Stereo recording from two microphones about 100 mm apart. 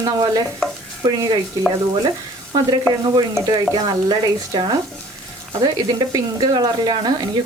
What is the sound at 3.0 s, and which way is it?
Speech, 40° right (ahead or behind).